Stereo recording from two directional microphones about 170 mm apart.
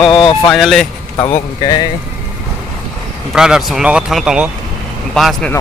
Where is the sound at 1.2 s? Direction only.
35° left (ahead or behind).